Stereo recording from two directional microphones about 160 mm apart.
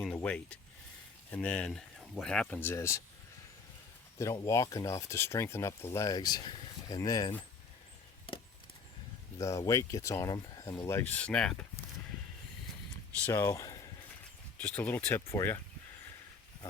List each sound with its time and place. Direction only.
0.0 s speech: 5° left (ahead or behind)
4.2 s speech: 20° left (ahead or behind)
9.4 s speech: 20° left (ahead or behind)
13.2 s speech: 15° left (ahead or behind)
14.6 s speech: 10° left (ahead or behind)